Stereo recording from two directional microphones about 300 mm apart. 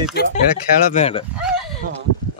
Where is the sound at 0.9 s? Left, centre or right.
Left.